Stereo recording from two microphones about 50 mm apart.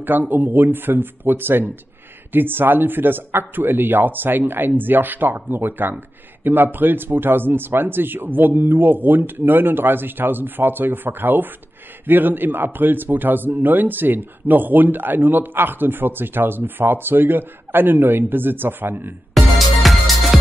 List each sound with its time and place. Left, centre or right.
0.0 s a man's voice: right
19.3 s music: centre